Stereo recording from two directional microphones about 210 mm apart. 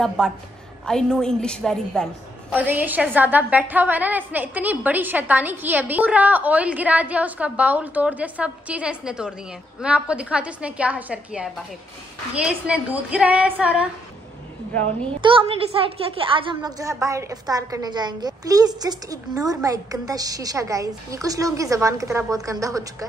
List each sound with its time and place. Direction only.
0.2 s a woman's voice: 5° left (ahead or behind)
2.5 s a woman's voice: 10° right (ahead or behind)
14.7 s a woman's voice: 5° left (ahead or behind)
15.1 s a woman's voice: 25° right (ahead or behind)